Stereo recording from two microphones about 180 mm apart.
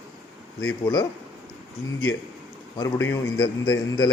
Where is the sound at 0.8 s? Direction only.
25° left (ahead or behind).